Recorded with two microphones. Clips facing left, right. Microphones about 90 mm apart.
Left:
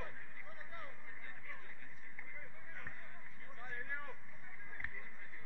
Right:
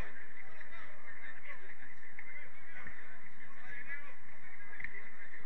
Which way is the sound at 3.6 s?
55° left (ahead or behind).